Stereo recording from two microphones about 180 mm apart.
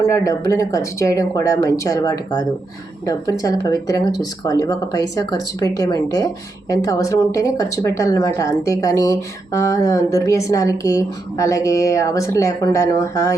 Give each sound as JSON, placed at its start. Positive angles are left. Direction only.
{"t": 0.0, "sound": "speech", "side_deg": 20}